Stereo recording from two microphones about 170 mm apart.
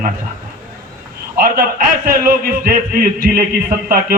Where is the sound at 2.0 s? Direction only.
60° right (ahead or behind).